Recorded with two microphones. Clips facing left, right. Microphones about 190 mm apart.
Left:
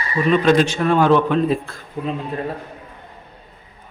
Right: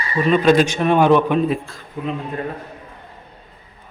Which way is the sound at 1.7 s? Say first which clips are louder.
Left 1 dB; 60° left (ahead or behind).